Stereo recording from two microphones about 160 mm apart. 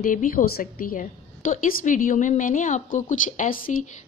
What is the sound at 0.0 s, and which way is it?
A woman's voice, 55° left (ahead or behind).